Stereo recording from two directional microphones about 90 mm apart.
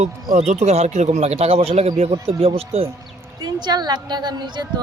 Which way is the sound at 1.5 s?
90° right.